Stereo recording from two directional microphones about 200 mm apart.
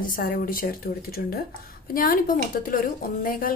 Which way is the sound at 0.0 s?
45° left (ahead or behind).